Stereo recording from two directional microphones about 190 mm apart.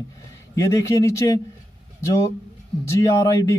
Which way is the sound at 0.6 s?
15° left (ahead or behind).